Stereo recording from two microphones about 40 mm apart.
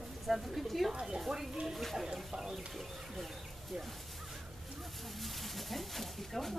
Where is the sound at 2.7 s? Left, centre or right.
Centre.